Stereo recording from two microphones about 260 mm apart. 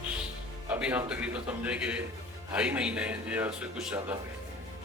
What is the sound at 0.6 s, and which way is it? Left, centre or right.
A man's voice, centre.